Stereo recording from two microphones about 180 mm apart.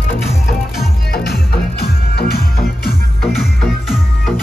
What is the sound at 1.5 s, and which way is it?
Music, 60° left (ahead or behind).